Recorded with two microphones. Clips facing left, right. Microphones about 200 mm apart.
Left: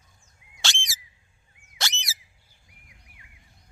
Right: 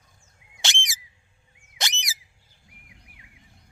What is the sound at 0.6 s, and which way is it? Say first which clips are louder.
Squawk: right 1 dB; 20° right (ahead or behind).